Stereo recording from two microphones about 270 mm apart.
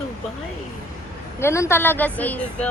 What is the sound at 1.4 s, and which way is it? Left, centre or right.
Speech, centre.